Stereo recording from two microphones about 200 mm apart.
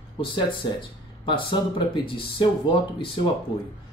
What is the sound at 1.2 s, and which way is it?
Speech, 25° left (ahead or behind).